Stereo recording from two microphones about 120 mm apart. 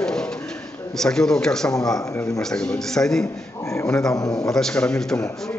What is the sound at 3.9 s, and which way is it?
A man's voice, 5° left (ahead or behind).